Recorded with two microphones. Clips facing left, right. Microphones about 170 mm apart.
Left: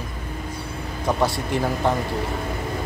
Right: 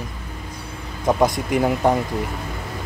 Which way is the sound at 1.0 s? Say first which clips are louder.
Right 4 dB; 20° right (ahead or behind).